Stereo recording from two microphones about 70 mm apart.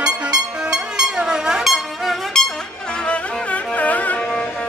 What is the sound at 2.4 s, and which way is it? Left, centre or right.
Music, centre.